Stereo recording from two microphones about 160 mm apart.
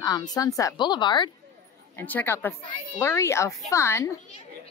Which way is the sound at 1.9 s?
10° left (ahead or behind).